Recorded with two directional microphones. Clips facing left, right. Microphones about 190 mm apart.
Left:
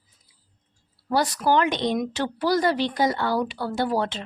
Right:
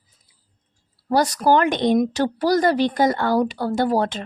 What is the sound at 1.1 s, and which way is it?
Speech, 40° right (ahead or behind).